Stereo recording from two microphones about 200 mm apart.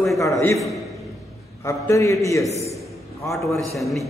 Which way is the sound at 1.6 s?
15° left (ahead or behind).